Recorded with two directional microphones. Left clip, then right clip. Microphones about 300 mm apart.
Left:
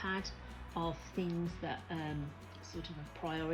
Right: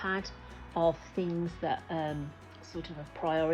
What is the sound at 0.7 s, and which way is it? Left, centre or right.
Speech, left.